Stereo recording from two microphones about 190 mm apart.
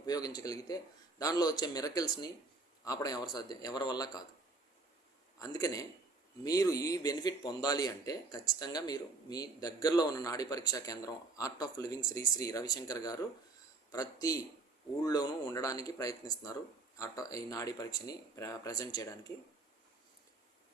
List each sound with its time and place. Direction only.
0.0 s a man's voice: 20° left (ahead or behind)
5.4 s a man's voice: 20° left (ahead or behind)